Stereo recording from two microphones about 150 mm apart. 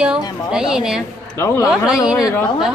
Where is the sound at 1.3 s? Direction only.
20° left (ahead or behind).